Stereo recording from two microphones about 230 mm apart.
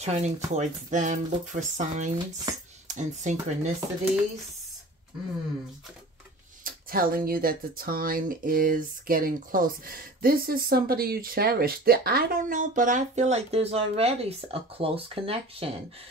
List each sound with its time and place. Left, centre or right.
0.0 s speech: right
6.6 s speech: right